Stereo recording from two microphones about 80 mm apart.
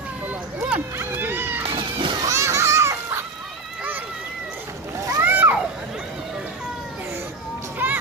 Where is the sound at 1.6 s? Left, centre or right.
Right.